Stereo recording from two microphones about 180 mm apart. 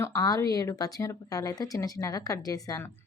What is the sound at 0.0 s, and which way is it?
Speech, 20° left (ahead or behind).